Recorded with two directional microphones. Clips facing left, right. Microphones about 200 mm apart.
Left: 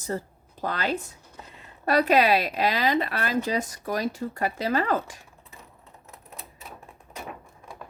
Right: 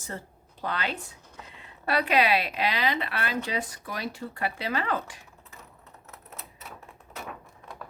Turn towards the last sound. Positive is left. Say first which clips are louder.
# left 1 dB
turn(degrees=15)  # may be behind; listen again after turning